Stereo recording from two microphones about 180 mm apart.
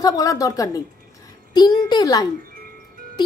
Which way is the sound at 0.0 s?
20° left (ahead or behind).